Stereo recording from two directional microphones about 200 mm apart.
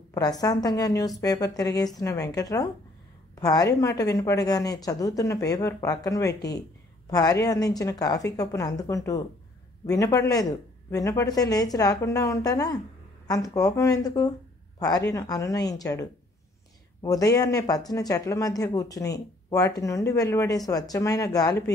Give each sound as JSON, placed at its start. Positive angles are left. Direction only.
{"t": 0.1, "sound": "a woman's voice", "side_deg": 20}